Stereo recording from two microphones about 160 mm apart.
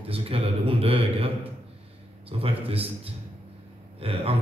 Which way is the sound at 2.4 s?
35° right (ahead or behind).